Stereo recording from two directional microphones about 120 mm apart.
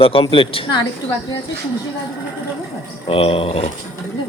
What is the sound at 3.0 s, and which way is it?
Speech, 50° left (ahead or behind).